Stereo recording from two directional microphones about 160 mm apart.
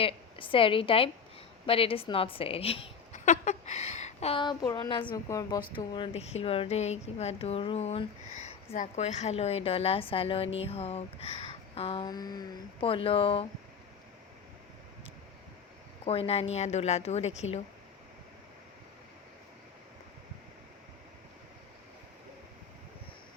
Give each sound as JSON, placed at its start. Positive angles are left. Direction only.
{"t": 0.0, "sound": "a woman's voice", "side_deg": 35}
{"t": 3.1, "sound": "a woman's voice", "side_deg": 50}
{"t": 12.0, "sound": "a woman's voice", "side_deg": 25}
{"t": 16.0, "sound": "a woman's voice", "side_deg": 40}